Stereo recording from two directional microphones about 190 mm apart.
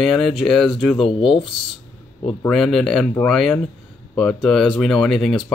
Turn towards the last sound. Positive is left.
turn(degrees=0)  # may be behind; listen again after turning